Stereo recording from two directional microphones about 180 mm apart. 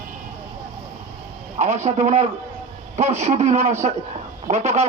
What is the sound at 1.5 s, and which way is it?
Speech, 40° right (ahead or behind).